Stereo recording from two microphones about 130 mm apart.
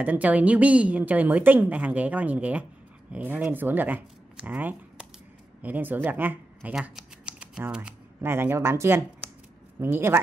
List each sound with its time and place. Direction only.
0.0 s a woman's voice: 10° right (ahead or behind)
6.7 s shuffling cards: 5° right (ahead or behind)
8.3 s a woman's voice: 15° right (ahead or behind)